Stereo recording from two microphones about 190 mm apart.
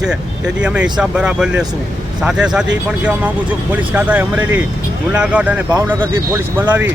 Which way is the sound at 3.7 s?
10° right (ahead or behind).